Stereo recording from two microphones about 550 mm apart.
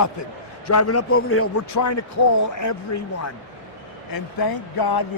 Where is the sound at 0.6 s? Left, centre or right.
Left.